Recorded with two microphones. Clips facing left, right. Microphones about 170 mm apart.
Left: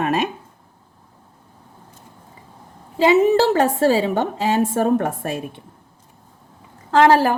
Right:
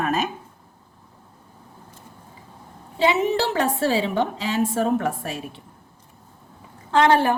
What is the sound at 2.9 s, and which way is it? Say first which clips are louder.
A woman's voice: left 6 dB; 40° left (ahead or behind).